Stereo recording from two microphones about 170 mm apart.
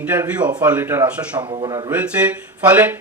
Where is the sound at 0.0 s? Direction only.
10° right (ahead or behind).